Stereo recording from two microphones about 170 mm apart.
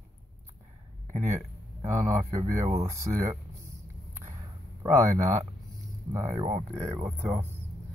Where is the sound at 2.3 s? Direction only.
20° right (ahead or behind).